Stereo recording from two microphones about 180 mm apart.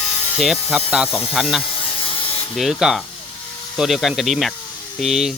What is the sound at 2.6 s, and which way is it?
Speech, centre (ahead or behind).